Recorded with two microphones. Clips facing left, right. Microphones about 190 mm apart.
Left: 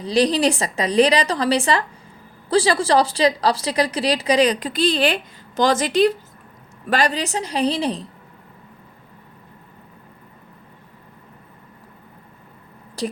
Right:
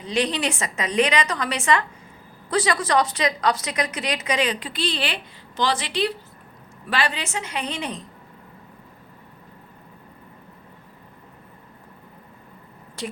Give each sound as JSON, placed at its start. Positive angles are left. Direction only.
{"t": 0.0, "sound": "a woman's voice", "side_deg": 35}
{"t": 13.0, "sound": "a woman's voice", "side_deg": 35}